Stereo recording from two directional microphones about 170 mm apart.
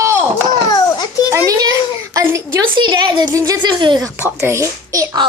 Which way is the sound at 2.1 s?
15° right (ahead or behind).